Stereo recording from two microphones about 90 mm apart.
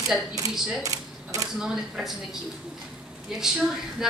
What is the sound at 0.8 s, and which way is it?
Cash register, 40° right (ahead or behind).